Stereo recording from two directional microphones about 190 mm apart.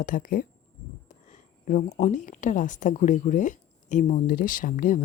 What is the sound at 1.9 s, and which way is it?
Speech, 40° left (ahead or behind).